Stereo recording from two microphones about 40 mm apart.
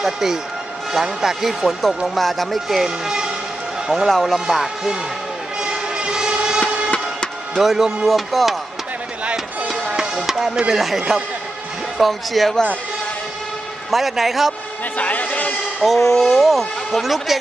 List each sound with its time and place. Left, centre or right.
0.9 s speech: centre
1.6 s speech: centre
2.8 s speech: centre
5.6 s vehicle: right
6.6 s music: left
7.5 s speech: centre
9.7 s music: centre
10.7 s speech: centre
13.8 s speech: centre
15.0 s a sound: left
15.8 s speech: centre